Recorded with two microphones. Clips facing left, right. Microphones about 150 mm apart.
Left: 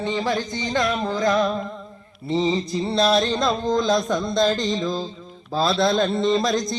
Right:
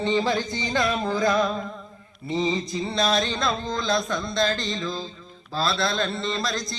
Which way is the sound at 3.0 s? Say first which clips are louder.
Left 5 dB; 5° left (ahead or behind).